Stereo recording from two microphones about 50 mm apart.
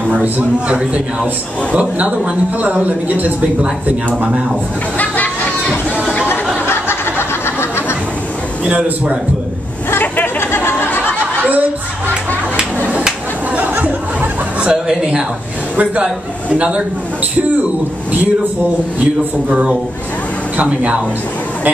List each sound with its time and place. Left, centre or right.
0.1 s a man's voice: right
4.9 s music: left
6.6 s a sound: left
8.6 s a man's voice: right
9.8 s chatter: left
12.5 s a sound: right
14.7 s a woman's voice: centre
15.7 s a man's voice: right
20.5 s a man's voice: right